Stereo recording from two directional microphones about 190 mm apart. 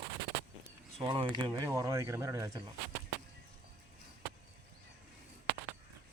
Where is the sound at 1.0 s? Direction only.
20° right (ahead or behind).